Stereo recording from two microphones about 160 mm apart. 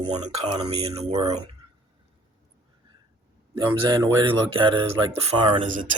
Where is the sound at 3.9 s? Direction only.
20° right (ahead or behind).